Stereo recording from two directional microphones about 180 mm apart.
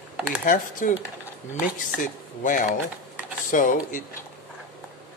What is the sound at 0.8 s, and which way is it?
Speech, 45° left (ahead or behind).